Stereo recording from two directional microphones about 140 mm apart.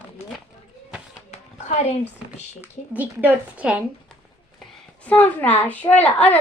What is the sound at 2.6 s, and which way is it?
Speech, 10° right (ahead or behind).